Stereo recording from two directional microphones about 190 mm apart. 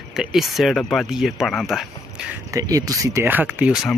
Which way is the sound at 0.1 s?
Centre (ahead or behind).